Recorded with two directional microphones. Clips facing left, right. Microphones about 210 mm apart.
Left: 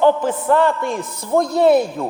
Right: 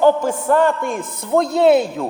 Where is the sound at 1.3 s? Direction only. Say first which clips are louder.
Even; 25° right (ahead or behind).